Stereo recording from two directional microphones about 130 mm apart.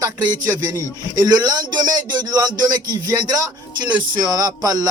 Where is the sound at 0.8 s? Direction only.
30° right (ahead or behind).